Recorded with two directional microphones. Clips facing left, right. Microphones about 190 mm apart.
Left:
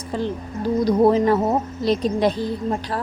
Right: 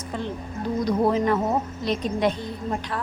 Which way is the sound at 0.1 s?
35° left (ahead or behind).